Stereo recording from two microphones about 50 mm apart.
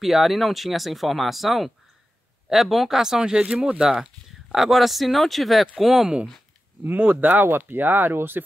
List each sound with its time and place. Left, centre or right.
0.0 s speech: centre
7.0 s speech: right